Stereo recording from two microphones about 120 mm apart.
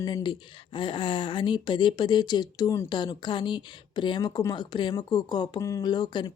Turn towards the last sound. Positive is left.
turn(degrees=40)  # may be behind; listen again after turning